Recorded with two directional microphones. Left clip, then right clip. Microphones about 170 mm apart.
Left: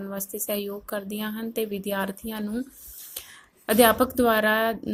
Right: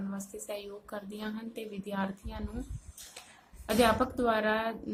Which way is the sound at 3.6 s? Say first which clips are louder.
Left 7 dB; 45° left (ahead or behind).